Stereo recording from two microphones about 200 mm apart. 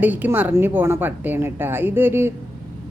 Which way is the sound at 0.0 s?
10° right (ahead or behind).